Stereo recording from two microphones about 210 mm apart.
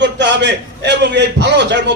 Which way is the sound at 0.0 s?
55° right (ahead or behind).